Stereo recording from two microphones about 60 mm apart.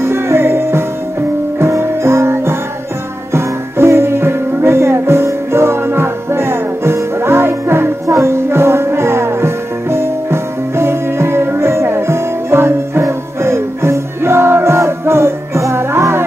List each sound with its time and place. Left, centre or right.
0.0 s music: right